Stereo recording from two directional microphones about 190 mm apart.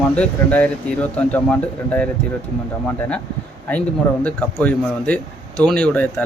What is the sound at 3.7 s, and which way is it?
A man's voice, 5° left (ahead or behind).